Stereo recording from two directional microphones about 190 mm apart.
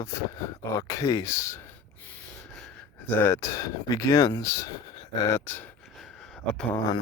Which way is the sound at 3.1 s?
10° left (ahead or behind).